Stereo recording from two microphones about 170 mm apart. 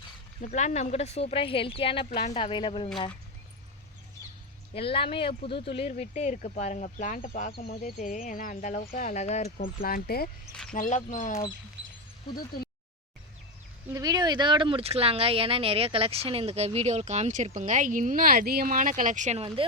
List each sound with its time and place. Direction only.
0.5 s speech: 40° left (ahead or behind)
4.7 s speech: 35° left (ahead or behind)
9.8 s speech: 60° left (ahead or behind)
10.5 s a sound: 5° left (ahead or behind)
10.8 s speech: 45° left (ahead or behind)
12.3 s speech: 60° left (ahead or behind)
13.9 s speech: 20° right (ahead or behind)